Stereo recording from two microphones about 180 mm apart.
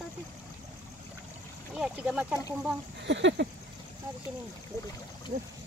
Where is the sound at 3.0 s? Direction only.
90° right.